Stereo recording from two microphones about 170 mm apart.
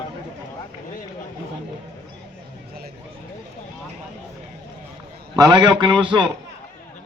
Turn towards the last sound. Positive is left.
turn(degrees=-30)  # may be behind; listen again after turning